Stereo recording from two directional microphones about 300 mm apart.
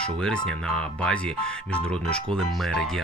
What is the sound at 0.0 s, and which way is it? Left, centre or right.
Speech, centre.